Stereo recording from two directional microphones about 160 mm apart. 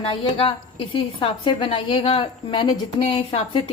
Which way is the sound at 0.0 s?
35° left (ahead or behind).